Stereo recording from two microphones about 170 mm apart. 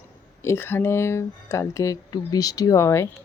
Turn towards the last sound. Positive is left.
turn(degrees=15)  # may be behind; listen again after turning